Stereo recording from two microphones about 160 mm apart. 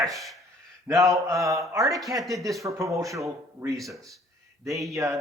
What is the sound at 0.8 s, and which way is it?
Speech, 20° right (ahead or behind).